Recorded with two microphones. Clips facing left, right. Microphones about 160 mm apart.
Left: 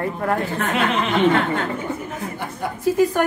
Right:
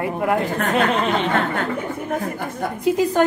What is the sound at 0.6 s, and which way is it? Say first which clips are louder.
Speech: right 2 dB; 40° right (ahead or behind).